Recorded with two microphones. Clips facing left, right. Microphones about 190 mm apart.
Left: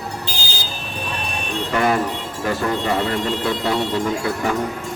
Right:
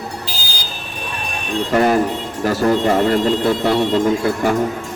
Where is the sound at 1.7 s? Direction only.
40° right (ahead or behind).